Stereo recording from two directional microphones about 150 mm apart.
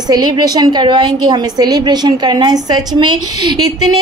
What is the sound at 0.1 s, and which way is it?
A woman's voice, 30° right (ahead or behind).